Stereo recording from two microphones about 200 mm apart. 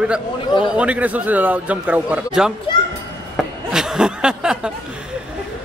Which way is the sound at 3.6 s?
5° right (ahead or behind).